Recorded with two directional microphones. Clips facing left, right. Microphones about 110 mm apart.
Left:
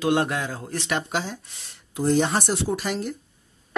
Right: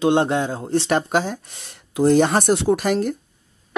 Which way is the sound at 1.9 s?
60° right (ahead or behind).